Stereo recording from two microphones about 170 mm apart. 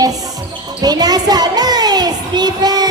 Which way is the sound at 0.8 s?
25° right (ahead or behind).